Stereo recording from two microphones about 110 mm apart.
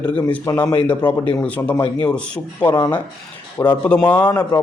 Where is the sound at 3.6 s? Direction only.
20° left (ahead or behind).